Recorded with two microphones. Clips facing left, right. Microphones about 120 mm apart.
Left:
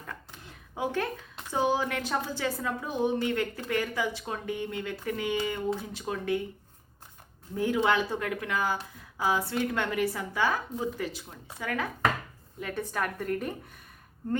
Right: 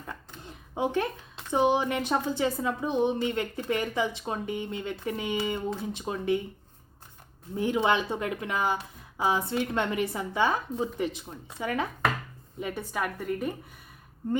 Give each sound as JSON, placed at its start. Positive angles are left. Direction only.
{"t": 0.7, "sound": "a woman's voice", "side_deg": -20}
{"t": 7.5, "sound": "a woman's voice", "side_deg": -20}